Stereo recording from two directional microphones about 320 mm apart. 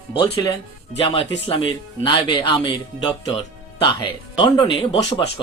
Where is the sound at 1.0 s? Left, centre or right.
Centre.